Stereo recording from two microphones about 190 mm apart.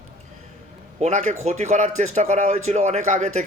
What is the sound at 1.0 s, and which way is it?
A man's voice, 40° right (ahead or behind).